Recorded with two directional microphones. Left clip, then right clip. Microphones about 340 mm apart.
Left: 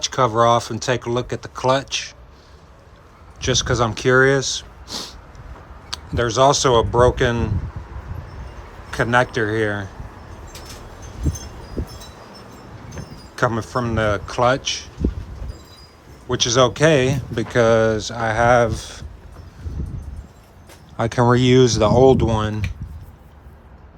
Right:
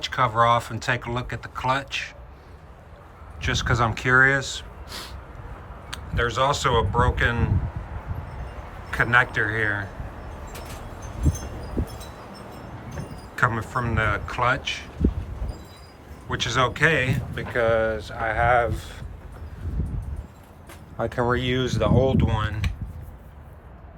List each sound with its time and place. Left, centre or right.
0.0 s speech: centre
3.4 s speech: centre
8.9 s speech: centre
13.3 s speech: centre
16.3 s speech: centre
21.1 s speech: centre